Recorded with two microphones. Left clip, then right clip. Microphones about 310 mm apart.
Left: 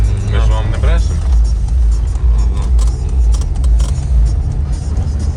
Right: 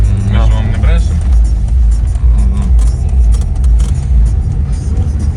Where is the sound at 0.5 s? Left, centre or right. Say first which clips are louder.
Even; left.